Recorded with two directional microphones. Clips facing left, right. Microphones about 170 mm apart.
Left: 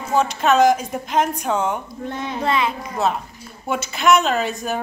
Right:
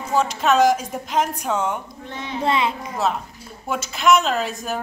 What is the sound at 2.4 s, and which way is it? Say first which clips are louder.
Speech: right 1 dB; 25° right (ahead or behind).